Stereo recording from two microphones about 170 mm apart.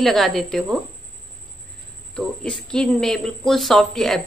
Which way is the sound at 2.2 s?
5° left (ahead or behind).